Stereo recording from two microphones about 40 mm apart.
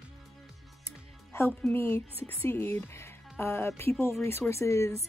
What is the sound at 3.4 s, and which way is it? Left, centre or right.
Speech, left.